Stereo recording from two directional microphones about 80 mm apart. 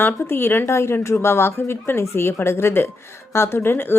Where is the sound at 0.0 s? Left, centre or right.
Left.